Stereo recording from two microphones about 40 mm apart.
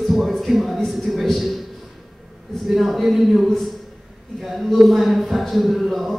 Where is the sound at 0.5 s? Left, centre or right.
Centre.